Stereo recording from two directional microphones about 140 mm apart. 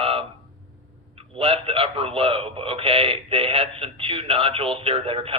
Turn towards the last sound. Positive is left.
turn(degrees=-40)  # may be behind; listen again after turning